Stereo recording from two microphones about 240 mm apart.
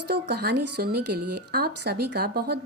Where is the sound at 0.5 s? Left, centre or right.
Right.